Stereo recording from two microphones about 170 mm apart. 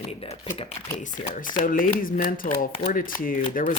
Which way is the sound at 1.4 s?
55° left (ahead or behind).